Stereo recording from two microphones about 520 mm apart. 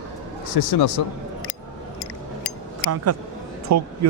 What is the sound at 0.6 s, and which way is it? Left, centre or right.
Speech, left.